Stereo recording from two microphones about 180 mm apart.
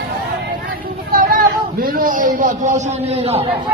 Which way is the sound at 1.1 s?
55° right (ahead or behind).